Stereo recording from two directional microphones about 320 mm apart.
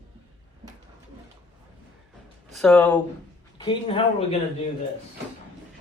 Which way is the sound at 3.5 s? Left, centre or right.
Centre.